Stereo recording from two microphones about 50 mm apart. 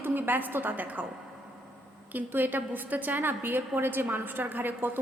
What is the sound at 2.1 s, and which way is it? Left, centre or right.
A woman's voice, right.